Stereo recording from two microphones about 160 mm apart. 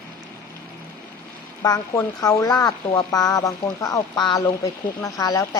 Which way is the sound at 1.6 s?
25° left (ahead or behind).